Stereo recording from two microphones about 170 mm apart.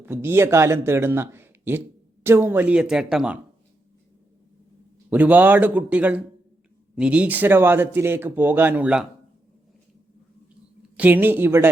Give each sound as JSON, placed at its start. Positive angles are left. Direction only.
{"t": 0.0, "sound": "speech", "side_deg": -15}
{"t": 5.0, "sound": "speech", "side_deg": -10}
{"t": 10.9, "sound": "speech", "side_deg": -10}